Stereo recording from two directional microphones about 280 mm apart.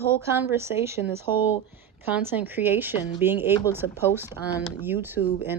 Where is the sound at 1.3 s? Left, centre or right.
Centre.